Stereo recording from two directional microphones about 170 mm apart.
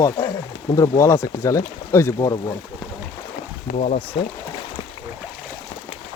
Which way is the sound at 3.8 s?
40° left (ahead or behind).